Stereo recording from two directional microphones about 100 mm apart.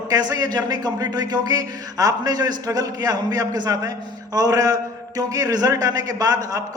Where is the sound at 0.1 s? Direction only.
40° right (ahead or behind).